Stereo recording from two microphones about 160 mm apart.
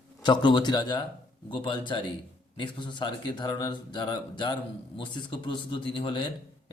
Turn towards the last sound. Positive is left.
turn(degrees=30)  # may be behind; listen again after turning